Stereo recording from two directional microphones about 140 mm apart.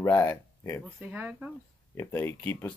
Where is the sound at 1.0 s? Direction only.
10° right (ahead or behind).